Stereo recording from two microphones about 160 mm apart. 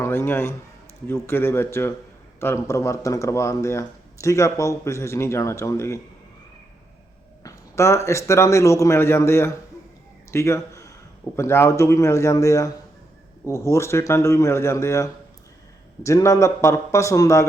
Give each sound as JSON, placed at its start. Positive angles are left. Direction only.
{"t": 0.0, "sound": "a man's voice", "side_deg": 15}
{"t": 7.4, "sound": "speech", "side_deg": 20}